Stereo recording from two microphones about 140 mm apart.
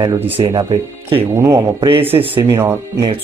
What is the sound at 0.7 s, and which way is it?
Speech, 40° right (ahead or behind).